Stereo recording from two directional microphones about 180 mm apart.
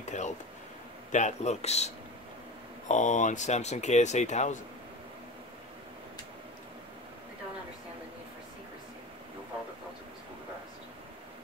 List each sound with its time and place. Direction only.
0.0 s a sound: 40° left (ahead or behind)
1.1 s speech: 40° left (ahead or behind)
2.9 s speech: 45° left (ahead or behind)